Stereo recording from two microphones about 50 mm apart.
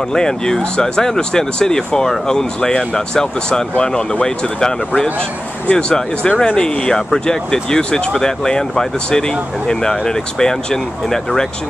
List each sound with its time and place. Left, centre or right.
0.1 s speech: centre